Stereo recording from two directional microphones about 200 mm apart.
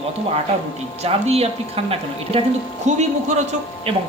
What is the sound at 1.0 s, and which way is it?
A man's voice, 30° right (ahead or behind).